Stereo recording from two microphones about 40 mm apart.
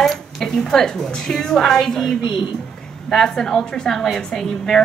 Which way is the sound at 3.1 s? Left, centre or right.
Centre.